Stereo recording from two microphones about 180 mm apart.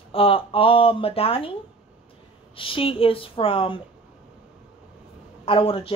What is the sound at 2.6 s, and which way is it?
Speech, 30° left (ahead or behind).